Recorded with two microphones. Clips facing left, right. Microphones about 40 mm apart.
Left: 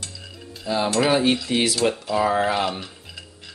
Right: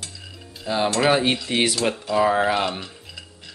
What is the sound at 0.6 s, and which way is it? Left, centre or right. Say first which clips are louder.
Cutlery: right 1 dB; centre.